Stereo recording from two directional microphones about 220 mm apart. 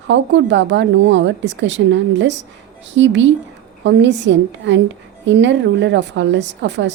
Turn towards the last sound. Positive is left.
turn(degrees=-55)  # may be behind; listen again after turning